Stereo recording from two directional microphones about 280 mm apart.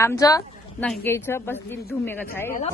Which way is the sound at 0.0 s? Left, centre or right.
Centre.